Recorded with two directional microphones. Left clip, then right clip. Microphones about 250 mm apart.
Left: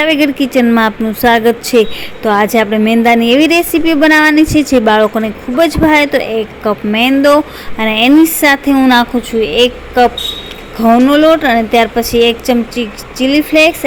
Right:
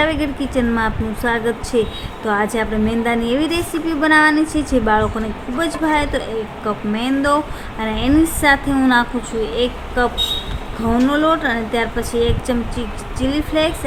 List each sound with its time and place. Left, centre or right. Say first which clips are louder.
0.0 s a woman's voice: left 8 dB; left